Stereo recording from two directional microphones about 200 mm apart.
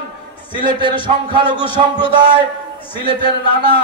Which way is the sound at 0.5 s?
25° left (ahead or behind).